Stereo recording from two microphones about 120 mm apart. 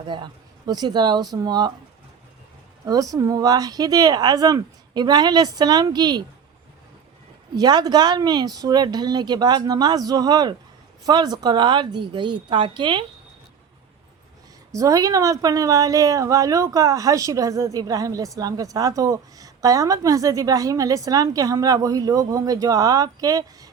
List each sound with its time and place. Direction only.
0.0 s speech: 40° right (ahead or behind)
2.8 s speech: 30° right (ahead or behind)
7.5 s speech: 35° right (ahead or behind)
14.7 s a woman's voice: 30° right (ahead or behind)